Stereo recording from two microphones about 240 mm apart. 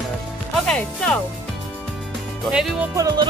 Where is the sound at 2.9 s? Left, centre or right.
Centre.